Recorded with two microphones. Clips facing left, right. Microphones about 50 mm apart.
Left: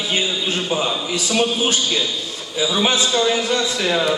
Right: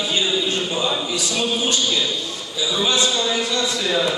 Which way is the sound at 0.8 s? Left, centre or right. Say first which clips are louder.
Left 1 dB; left.